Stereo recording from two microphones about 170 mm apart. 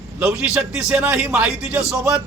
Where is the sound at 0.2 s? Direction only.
5° right (ahead or behind).